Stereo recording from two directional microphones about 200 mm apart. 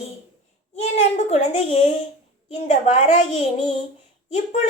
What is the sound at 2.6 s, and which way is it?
Speech, 35° left (ahead or behind).